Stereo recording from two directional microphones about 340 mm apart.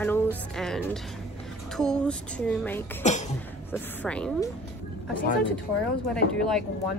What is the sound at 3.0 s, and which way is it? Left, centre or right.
Cough, centre.